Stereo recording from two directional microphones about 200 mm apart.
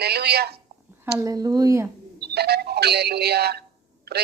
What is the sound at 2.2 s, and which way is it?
Speech, 55° right (ahead or behind).